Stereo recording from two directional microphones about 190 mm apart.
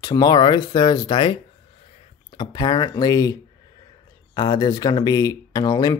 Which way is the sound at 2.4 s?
25° left (ahead or behind).